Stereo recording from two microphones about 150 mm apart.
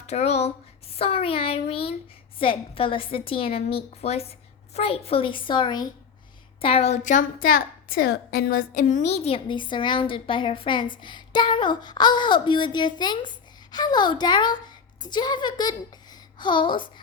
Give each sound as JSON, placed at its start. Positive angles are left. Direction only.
{"t": 0.1, "sound": "a woman's voice", "side_deg": 45}